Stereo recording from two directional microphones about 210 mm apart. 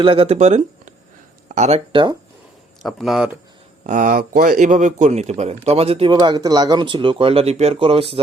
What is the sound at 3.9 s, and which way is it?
A man's voice, 35° right (ahead or behind).